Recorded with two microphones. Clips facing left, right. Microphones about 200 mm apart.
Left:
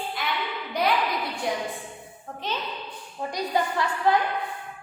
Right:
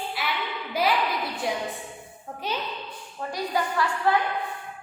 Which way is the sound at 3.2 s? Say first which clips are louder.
Left 1 dB; 15° left (ahead or behind).